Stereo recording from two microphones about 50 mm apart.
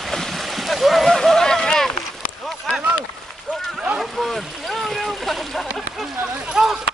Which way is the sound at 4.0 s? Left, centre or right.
Centre.